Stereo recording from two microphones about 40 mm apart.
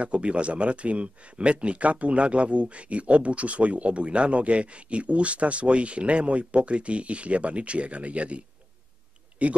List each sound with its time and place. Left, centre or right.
0.0 s speech: right